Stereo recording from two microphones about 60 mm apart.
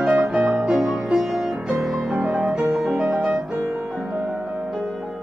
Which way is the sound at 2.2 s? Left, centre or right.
Centre.